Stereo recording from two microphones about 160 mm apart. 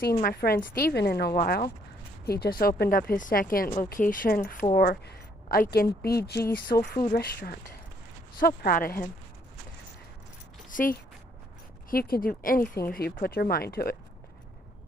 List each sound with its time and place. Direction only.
0.2 s a woman's voice: 70° left (ahead or behind)
8.4 s a woman's voice: 65° left (ahead or behind)
10.7 s a woman's voice: 55° left (ahead or behind); by 13.9 s 75° left (ahead or behind)